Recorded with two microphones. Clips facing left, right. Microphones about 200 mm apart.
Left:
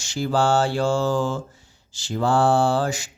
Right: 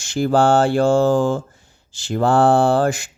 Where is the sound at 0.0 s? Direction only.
55° right (ahead or behind).